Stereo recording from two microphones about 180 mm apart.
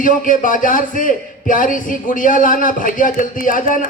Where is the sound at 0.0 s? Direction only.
50° left (ahead or behind).